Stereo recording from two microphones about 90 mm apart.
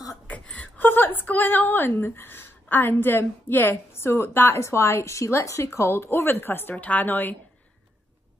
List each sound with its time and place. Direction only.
0.3 s a woman's voice: 15° left (ahead or behind)